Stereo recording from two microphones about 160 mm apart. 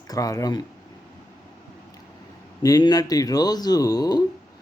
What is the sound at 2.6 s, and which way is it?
Speech, 25° left (ahead or behind).